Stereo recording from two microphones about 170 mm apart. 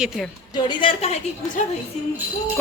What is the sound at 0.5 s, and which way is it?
Speech, 30° left (ahead or behind).